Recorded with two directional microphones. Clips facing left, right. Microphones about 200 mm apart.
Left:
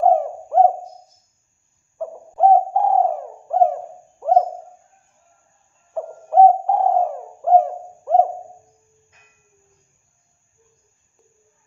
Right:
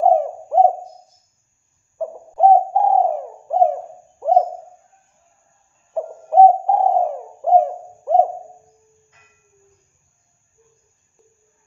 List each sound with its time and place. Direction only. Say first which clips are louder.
0.0 s owl: right 1 dB; 15° right (ahead or behind)
2.0 s bird: right 1 dB; 15° right (ahead or behind)
4.2 s owl: right 1 dB; 15° right (ahead or behind)
5.9 s bird: right 1 dB; 15° right (ahead or behind)